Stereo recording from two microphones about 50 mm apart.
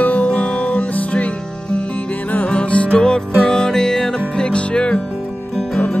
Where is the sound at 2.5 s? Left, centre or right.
Left.